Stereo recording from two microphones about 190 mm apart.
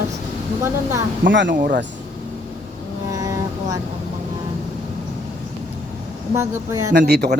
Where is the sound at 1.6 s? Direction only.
45° right (ahead or behind).